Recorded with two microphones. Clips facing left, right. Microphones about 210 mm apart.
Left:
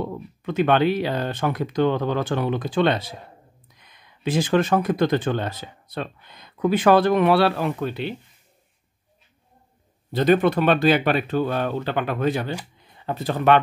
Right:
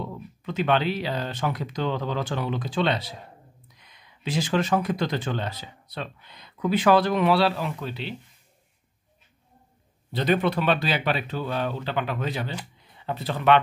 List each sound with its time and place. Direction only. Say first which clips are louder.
0.0 s speech: left 5 dB; 55° left (ahead or behind)
10.1 s speech: left 5 dB; 50° left (ahead or behind)